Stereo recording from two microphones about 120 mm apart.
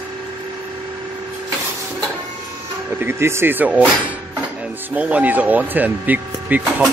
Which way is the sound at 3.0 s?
20° right (ahead or behind).